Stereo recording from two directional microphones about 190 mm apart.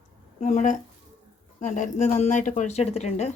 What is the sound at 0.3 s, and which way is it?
Speech, 40° left (ahead or behind).